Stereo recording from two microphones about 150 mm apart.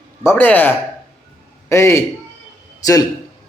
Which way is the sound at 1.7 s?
20° left (ahead or behind).